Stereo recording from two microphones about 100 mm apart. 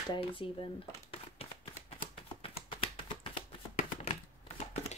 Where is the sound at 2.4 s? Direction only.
75° left (ahead or behind).